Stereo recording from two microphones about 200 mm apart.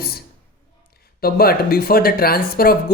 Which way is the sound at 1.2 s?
50° left (ahead or behind).